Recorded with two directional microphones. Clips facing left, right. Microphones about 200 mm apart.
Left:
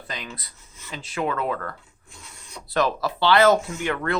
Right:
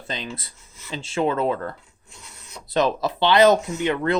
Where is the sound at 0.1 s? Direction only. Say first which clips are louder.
Right 5 dB; 25° right (ahead or behind).